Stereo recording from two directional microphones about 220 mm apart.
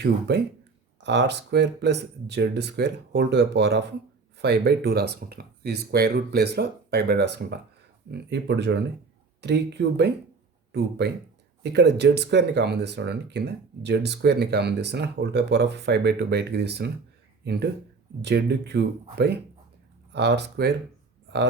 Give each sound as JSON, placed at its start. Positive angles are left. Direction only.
{"t": 0.0, "sound": "speech", "side_deg": -50}